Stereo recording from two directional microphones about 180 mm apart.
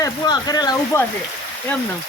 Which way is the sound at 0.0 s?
20° left (ahead or behind).